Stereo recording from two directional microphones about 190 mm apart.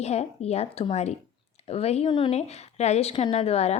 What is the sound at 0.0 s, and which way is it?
A woman's voice, 35° left (ahead or behind).